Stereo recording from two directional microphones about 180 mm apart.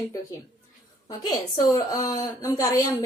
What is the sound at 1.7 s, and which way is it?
A woman's voice, 20° left (ahead or behind).